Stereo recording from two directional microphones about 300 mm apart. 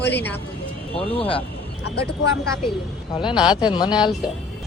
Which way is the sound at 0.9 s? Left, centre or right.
Centre.